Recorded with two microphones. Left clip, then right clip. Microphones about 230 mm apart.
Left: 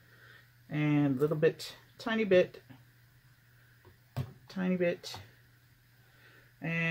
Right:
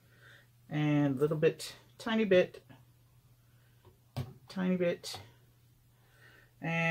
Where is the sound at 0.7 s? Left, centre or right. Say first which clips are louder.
Left 1 dB; centre.